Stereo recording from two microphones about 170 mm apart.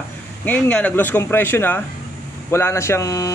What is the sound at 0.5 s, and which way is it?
Speech, 10° left (ahead or behind).